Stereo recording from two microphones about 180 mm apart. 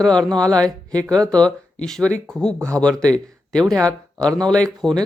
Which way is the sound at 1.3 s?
5° left (ahead or behind).